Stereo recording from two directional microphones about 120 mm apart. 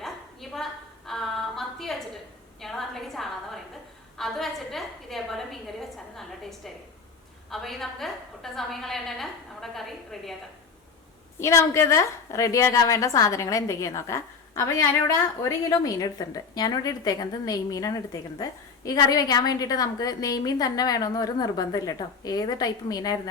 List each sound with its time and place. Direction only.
0.5 s a sound: centre (ahead or behind)
4.2 s a woman's voice: centre (ahead or behind)
11.3 s a woman's voice: 25° left (ahead or behind)